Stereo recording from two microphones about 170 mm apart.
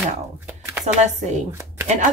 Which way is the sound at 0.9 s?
45° right (ahead or behind).